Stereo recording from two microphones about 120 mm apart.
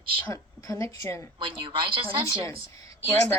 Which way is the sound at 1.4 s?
45° right (ahead or behind).